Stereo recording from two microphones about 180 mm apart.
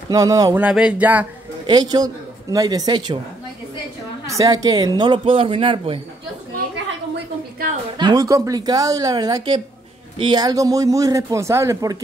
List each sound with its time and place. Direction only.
0.1 s a man's voice: 20° right (ahead or behind)
0.6 s a sound: 5° right (ahead or behind)
1.7 s a man's voice: 25° right (ahead or behind)
4.3 s a man's voice: 20° right (ahead or behind)
8.0 s a man's voice: 20° right (ahead or behind)